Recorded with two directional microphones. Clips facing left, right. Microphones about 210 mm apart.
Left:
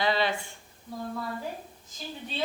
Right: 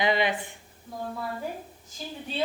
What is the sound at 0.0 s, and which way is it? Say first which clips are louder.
Speech: right 2 dB; 15° right (ahead or behind).